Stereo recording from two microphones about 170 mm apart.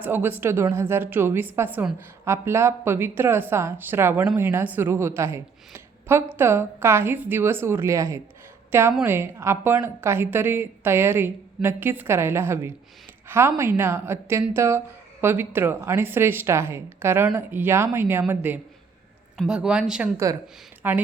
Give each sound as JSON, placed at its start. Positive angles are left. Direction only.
{"t": 0.0, "sound": "a woman's voice", "side_deg": -10}
{"t": 20.2, "sound": "speech", "side_deg": -20}